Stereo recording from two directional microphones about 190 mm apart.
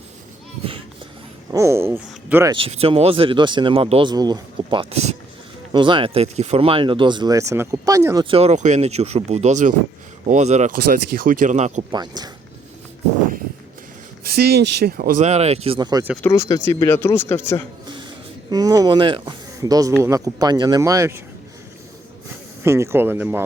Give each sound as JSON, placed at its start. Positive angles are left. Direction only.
{"t": 1.5, "sound": "speech", "side_deg": -15}
{"t": 2.5, "sound": "speech", "side_deg": -30}
{"t": 11.9, "sound": "speech", "side_deg": -20}
{"t": 14.3, "sound": "speech", "side_deg": -55}
{"t": 16.2, "sound": "speech", "side_deg": 15}
{"t": 18.5, "sound": "speech", "side_deg": -20}
{"t": 22.6, "sound": "speech", "side_deg": -15}